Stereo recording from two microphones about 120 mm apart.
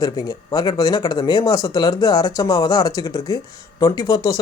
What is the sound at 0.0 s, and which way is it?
Speech, 35° left (ahead or behind).